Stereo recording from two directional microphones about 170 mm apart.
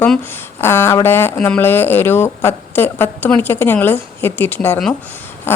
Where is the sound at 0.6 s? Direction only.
15° left (ahead or behind).